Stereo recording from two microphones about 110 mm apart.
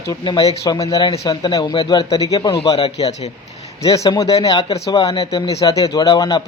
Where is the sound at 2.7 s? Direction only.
65° left (ahead or behind).